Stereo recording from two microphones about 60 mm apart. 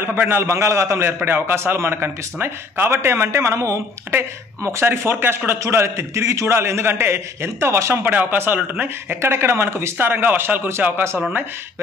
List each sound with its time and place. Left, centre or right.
0.3 s a man's voice: right
4.7 s a man's voice: right
8.0 s speech: right